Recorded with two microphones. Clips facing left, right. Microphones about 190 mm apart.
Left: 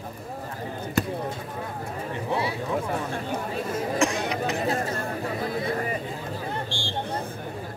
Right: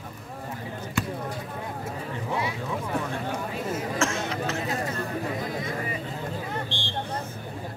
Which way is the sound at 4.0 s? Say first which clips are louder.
Left 4 dB; 15° left (ahead or behind).